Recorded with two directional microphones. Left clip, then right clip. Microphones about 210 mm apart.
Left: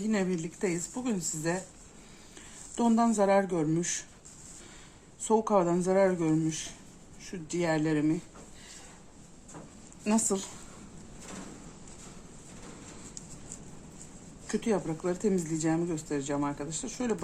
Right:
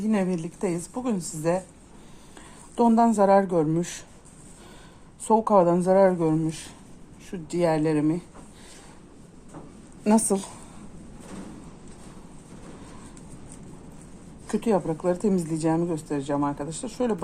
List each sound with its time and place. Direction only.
0.1 s speech: 30° right (ahead or behind)
2.7 s speech: 25° right (ahead or behind)
5.2 s a woman's voice: 30° right (ahead or behind)
10.0 s a woman's voice: 35° right (ahead or behind)
14.5 s a woman's voice: 35° right (ahead or behind)